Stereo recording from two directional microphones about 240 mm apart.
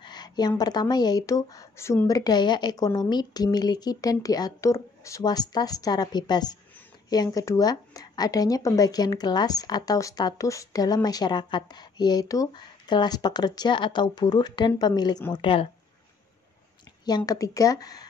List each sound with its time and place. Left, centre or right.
0.0 s a woman's voice: centre
17.2 s a woman's voice: centre